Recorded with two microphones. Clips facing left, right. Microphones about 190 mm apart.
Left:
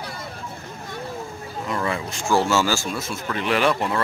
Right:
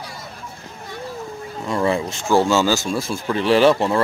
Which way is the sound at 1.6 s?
30° right (ahead or behind).